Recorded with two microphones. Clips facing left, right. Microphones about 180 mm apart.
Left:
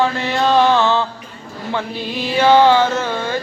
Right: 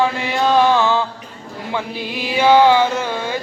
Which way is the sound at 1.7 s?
10° right (ahead or behind).